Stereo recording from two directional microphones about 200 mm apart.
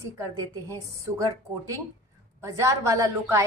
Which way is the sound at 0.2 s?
15° right (ahead or behind).